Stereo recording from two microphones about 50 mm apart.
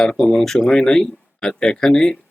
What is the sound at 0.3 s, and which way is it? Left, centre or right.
Speech, centre.